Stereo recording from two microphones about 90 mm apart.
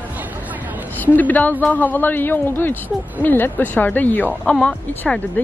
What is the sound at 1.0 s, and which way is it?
Speech, 20° left (ahead or behind).